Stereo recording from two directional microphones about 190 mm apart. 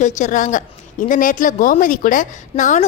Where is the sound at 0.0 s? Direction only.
40° left (ahead or behind).